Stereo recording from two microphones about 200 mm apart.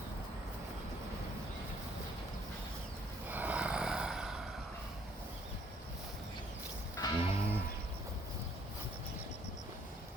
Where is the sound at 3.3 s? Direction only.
10° right (ahead or behind).